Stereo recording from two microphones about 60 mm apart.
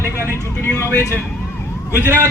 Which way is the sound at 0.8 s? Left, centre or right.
Left.